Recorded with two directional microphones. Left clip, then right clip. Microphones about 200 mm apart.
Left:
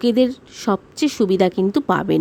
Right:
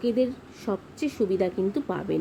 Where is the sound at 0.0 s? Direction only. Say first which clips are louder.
Left 8 dB; 50° left (ahead or behind).